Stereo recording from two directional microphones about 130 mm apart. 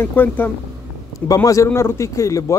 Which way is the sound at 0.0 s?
15° left (ahead or behind).